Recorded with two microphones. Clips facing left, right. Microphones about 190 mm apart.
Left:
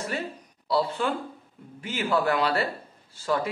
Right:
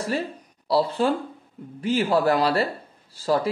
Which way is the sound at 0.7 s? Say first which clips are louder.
Right 4 dB; 35° right (ahead or behind).